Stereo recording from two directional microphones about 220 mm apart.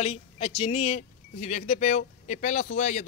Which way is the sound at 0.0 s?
25° left (ahead or behind).